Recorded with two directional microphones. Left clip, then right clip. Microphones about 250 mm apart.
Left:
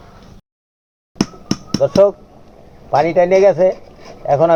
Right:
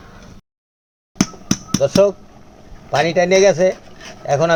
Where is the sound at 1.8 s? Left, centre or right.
Centre.